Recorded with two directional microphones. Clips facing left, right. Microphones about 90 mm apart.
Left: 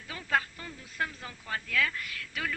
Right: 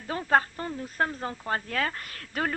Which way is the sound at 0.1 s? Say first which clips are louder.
Right 7 dB; 40° right (ahead or behind).